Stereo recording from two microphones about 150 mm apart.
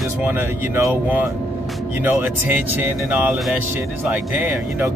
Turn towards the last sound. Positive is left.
turn(degrees=-15)  # may be behind; listen again after turning